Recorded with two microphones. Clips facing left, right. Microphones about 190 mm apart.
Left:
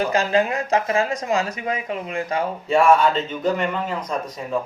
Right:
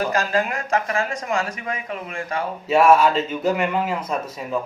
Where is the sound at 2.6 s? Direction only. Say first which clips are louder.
Right 1 dB; 5° right (ahead or behind).